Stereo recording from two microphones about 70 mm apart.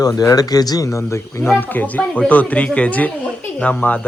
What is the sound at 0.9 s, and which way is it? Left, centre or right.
Speech, left.